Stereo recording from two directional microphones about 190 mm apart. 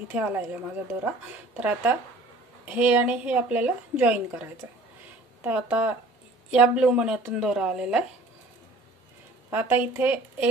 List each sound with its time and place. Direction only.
0.1 s a woman's voice: 10° right (ahead or behind)
1.6 s a woman's voice: 10° right (ahead or behind)
9.5 s a woman's voice: 10° right (ahead or behind)